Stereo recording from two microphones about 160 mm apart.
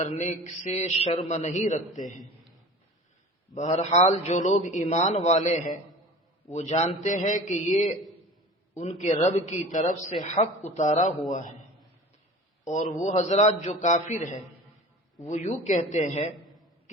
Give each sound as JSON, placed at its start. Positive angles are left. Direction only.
{"t": 0.0, "sound": "a man's voice", "side_deg": 45}
{"t": 3.5, "sound": "a man's voice", "side_deg": 45}
{"t": 12.6, "sound": "a man's voice", "side_deg": 50}